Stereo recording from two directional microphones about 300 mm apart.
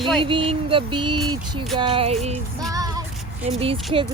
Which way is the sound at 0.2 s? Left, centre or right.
Centre.